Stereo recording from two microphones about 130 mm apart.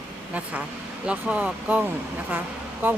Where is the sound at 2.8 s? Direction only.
15° right (ahead or behind).